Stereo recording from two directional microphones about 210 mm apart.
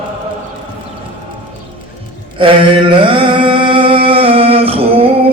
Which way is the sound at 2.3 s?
25° right (ahead or behind).